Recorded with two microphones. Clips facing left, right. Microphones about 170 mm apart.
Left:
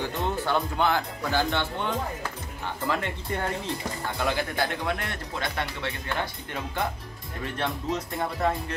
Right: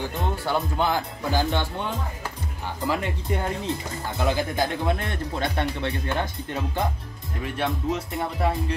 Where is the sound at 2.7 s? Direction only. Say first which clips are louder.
Right 3 dB; 15° right (ahead or behind).